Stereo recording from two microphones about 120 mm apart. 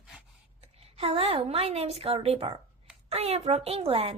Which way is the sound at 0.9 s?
55° right (ahead or behind).